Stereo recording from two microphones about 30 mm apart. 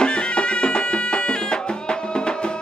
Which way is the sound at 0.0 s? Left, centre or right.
Left.